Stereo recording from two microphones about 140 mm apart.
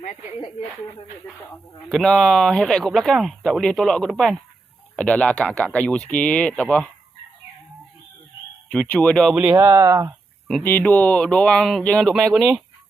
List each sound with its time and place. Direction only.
1.9 s speech: centre (ahead or behind)
8.7 s speech: 10° left (ahead or behind)
9.3 s speech: 10° right (ahead or behind)
9.6 s speech: 20° right (ahead or behind)
10.6 s speech: 15° left (ahead or behind); by 12.6 s 5° right (ahead or behind)